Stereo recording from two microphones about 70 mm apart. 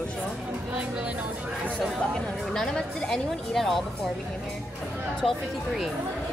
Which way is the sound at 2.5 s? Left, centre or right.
Centre.